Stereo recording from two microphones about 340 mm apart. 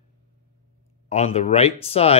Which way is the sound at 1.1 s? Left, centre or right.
Centre.